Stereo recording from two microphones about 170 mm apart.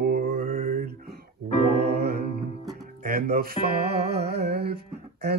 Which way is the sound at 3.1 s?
65° right (ahead or behind).